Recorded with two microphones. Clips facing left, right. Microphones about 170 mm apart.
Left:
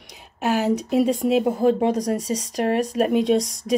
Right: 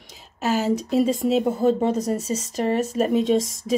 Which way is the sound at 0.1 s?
60° left (ahead or behind).